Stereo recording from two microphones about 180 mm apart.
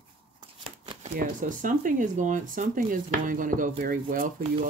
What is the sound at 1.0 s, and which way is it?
Speech, 50° right (ahead or behind).